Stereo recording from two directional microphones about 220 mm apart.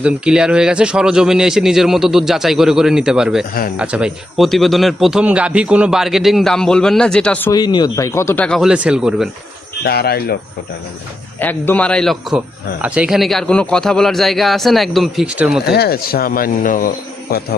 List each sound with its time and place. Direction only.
0.0 s a man's voice: 5° right (ahead or behind)
7.5 s a man's voice: 20° left (ahead or behind); by 9.3 s 5° right (ahead or behind)
9.8 s speech: 45° left (ahead or behind)
11.3 s a man's voice: 10° left (ahead or behind)
15.6 s speech: 45° left (ahead or behind)